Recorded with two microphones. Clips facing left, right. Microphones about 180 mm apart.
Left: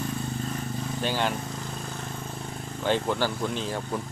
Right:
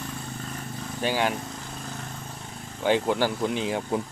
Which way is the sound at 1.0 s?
10° right (ahead or behind).